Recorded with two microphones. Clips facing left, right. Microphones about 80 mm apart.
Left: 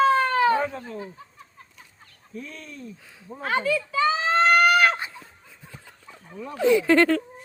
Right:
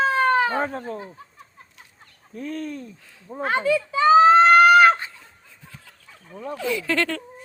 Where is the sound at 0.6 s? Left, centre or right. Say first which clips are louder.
Right 1 dB; right.